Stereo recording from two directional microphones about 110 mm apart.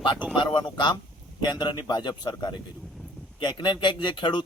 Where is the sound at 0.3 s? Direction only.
45° left (ahead or behind).